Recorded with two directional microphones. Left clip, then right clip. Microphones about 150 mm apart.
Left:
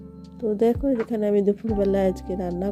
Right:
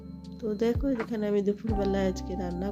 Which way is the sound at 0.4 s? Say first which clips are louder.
Left 7 dB; 30° left (ahead or behind).